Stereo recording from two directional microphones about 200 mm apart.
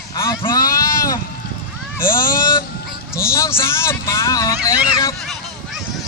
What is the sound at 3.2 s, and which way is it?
Speech, 15° left (ahead or behind).